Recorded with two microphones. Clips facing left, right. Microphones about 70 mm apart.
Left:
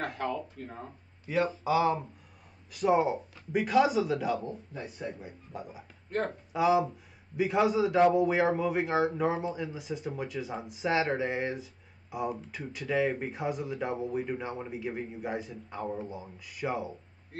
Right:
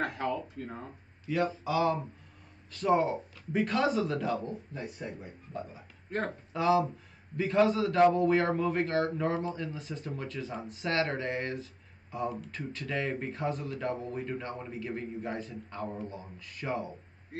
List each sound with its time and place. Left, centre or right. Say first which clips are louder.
1.3 s speech: left 2 dB; centre